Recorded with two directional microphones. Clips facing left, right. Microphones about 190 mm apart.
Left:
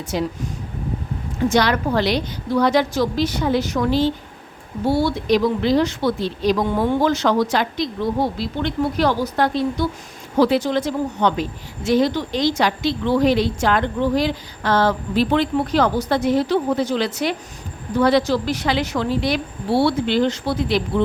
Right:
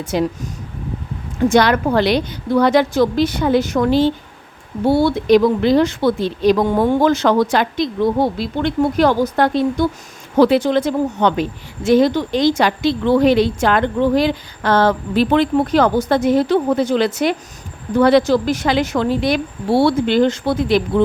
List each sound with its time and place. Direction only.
0.0 s speech: 55° right (ahead or behind)
1.5 s a woman's voice: 55° right (ahead or behind)